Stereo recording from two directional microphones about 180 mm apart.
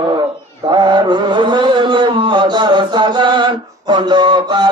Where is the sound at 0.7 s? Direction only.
25° right (ahead or behind).